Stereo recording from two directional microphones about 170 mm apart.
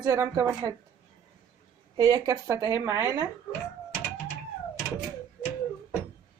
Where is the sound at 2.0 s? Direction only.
20° right (ahead or behind).